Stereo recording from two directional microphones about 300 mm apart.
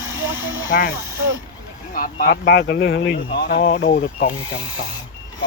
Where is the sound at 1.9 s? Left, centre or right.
Left.